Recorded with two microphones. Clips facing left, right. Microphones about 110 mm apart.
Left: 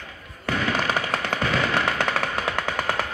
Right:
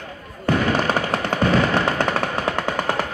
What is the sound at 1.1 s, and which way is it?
Music, 30° right (ahead or behind).